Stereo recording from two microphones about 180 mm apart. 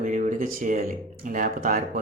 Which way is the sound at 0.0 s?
45° right (ahead or behind).